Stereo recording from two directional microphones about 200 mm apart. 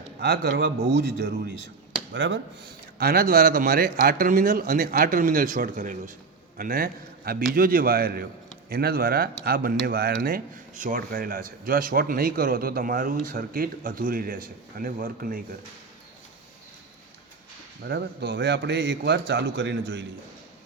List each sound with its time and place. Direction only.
0.2 s a man's voice: 55° right (ahead or behind)
2.1 s speech: 65° right (ahead or behind)
3.0 s speech: 50° right (ahead or behind)
17.8 s a man's voice: 55° right (ahead or behind)